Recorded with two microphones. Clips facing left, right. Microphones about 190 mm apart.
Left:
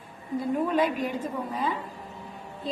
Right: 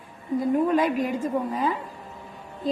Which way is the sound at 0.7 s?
45° right (ahead or behind).